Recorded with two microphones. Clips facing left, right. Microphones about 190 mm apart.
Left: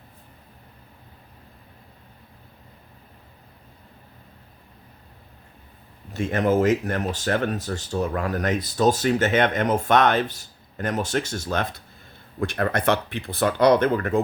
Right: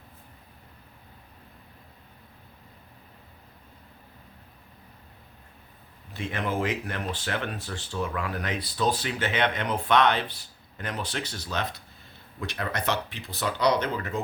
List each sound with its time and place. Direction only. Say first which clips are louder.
6.1 s speech: left 9 dB; 45° left (ahead or behind)